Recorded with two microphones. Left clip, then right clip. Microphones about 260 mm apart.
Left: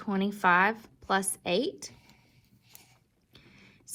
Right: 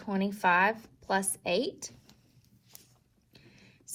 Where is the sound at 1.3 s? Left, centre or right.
Left.